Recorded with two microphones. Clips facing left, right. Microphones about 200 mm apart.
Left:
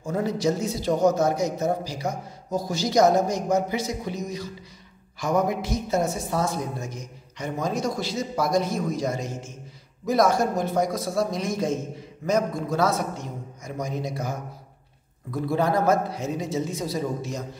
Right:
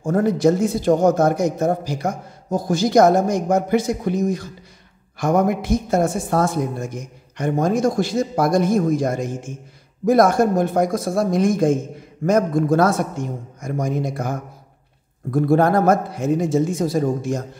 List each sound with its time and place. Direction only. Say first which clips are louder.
0.0 s a man's voice: right 8 dB; 50° right (ahead or behind)